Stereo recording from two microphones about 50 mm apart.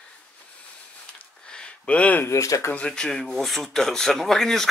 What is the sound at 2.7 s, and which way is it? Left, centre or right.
Speech, centre.